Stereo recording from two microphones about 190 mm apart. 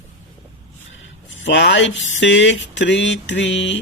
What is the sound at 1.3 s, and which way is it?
Speech, 70° left (ahead or behind).